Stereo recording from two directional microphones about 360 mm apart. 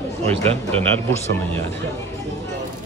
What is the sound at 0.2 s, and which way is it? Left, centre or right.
Speech, centre.